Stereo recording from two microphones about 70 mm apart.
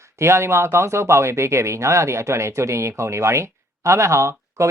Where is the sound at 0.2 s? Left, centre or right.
Right.